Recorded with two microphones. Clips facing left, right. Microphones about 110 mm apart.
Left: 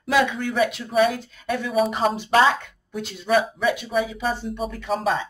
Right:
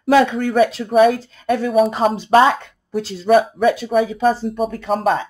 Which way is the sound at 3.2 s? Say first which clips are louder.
Right 7 dB; 45° right (ahead or behind).